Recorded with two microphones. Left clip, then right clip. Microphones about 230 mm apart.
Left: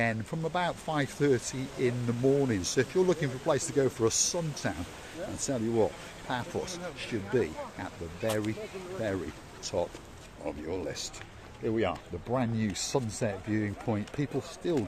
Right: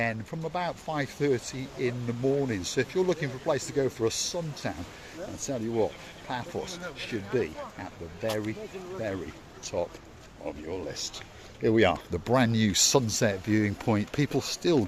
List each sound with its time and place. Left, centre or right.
0.0 s speech: centre
9.6 s speech: centre
11.6 s speech: right